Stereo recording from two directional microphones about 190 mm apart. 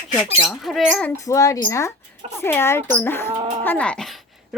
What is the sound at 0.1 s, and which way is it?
Speech, centre (ahead or behind).